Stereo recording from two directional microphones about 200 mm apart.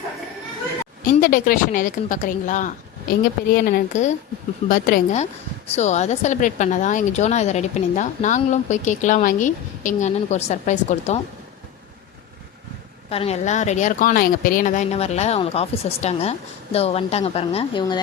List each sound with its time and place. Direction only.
1.1 s a woman's voice: 40° left (ahead or behind)
13.1 s a woman's voice: 30° left (ahead or behind)